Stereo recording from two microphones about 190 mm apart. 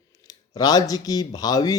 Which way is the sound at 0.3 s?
20° left (ahead or behind).